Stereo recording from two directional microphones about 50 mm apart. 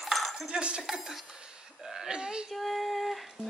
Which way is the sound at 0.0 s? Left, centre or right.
Centre.